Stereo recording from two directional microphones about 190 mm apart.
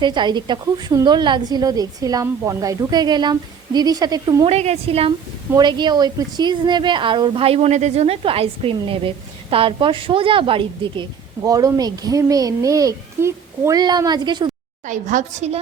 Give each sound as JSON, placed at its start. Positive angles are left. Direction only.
{"t": 0.0, "sound": "a woman's voice", "side_deg": -25}
{"t": 4.4, "sound": "a woman's voice", "side_deg": -35}
{"t": 14.8, "sound": "a woman's voice", "side_deg": -40}